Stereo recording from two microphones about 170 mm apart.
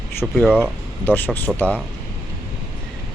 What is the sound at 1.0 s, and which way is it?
Speech, 10° left (ahead or behind).